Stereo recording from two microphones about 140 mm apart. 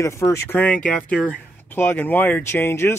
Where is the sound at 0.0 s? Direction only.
20° left (ahead or behind).